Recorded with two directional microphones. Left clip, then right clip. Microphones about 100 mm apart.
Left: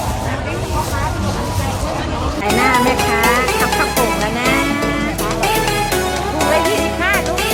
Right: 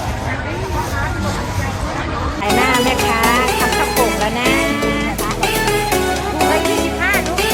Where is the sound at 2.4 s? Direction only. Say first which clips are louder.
Left 1 dB; centre (ahead or behind).